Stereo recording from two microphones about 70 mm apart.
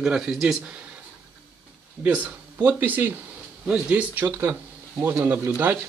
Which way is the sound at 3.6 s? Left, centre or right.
Centre.